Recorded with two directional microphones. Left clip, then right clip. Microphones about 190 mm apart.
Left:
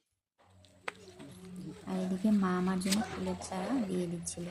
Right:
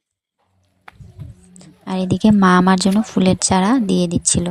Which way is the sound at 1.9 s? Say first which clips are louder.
Right 16 dB; 60° right (ahead or behind).